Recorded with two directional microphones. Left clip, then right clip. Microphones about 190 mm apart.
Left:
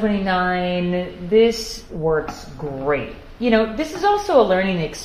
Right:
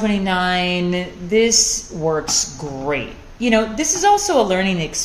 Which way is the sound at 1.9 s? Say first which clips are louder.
Left 2 dB; 30° right (ahead or behind).